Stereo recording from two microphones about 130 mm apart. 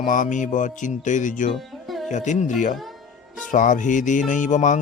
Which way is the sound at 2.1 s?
70° left (ahead or behind).